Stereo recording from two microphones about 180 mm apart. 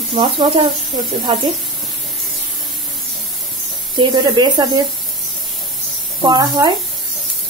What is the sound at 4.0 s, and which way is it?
Speech, 25° right (ahead or behind).